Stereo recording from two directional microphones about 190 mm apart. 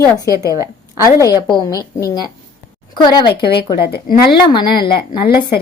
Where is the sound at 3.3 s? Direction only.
60° left (ahead or behind).